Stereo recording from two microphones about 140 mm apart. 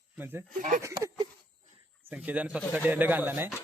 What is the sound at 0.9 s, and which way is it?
Speech, 30° right (ahead or behind).